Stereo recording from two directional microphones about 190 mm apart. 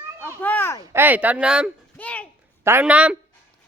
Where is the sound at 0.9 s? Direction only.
10° right (ahead or behind).